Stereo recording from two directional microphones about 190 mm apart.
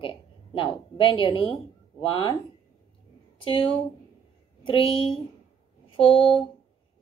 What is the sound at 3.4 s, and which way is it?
A woman's voice, 30° left (ahead or behind).